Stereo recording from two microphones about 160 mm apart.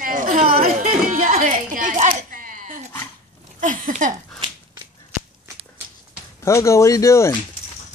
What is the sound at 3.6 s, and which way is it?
Speech, 55° right (ahead or behind).